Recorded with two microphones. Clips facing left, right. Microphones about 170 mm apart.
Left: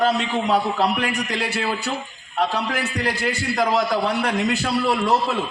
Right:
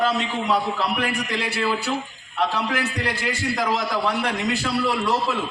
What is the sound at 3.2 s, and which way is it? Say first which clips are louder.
A man's voice: left 3 dB; 50° left (ahead or behind).